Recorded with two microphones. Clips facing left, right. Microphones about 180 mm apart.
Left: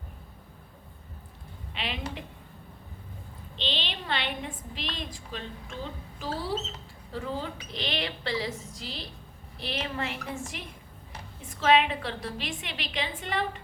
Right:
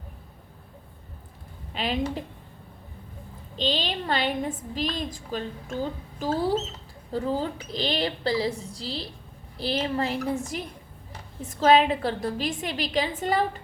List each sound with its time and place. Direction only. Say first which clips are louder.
1.7 s a woman's voice: right 8 dB; 40° right (ahead or behind)
3.5 s a woman's voice: right 7 dB; 40° right (ahead or behind)
11.4 s a woman's voice: right 4 dB; 40° right (ahead or behind)